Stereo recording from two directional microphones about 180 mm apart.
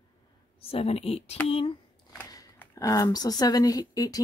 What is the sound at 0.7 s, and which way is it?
Speech, 35° left (ahead or behind).